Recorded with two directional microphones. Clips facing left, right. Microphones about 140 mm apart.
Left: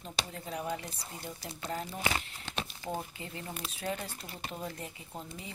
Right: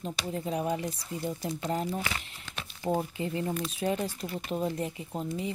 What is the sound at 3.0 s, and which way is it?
Speech, 25° right (ahead or behind).